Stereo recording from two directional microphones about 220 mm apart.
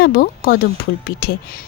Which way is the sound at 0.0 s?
45° left (ahead or behind).